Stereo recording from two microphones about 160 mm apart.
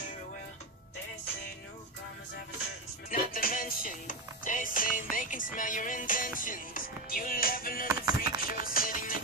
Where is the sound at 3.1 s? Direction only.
65° left (ahead or behind).